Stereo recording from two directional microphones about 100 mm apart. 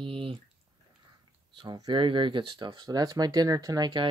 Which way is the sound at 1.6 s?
50° right (ahead or behind).